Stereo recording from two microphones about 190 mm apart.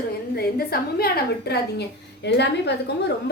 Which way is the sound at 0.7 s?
55° left (ahead or behind).